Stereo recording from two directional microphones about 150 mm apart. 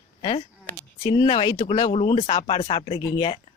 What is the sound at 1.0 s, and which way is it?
Speech, 30° left (ahead or behind).